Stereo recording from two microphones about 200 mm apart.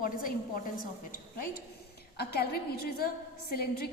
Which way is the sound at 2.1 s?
50° left (ahead or behind).